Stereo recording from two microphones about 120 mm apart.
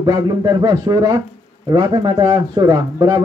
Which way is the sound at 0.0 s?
35° right (ahead or behind).